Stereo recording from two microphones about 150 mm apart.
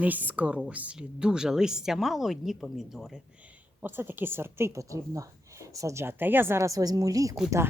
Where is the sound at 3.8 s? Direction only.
15° right (ahead or behind).